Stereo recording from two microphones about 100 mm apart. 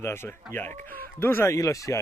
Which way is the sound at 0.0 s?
25° left (ahead or behind).